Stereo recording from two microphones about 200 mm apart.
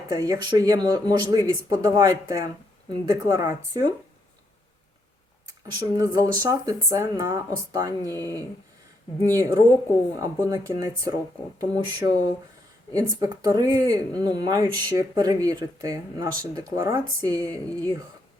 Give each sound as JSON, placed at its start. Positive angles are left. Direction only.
{"t": 0.1, "sound": "speech", "side_deg": -20}
{"t": 5.8, "sound": "speech", "side_deg": -15}
{"t": 8.1, "sound": "speech", "side_deg": 10}
{"t": 9.2, "sound": "speech", "side_deg": -15}
{"t": 17.7, "sound": "speech", "side_deg": 10}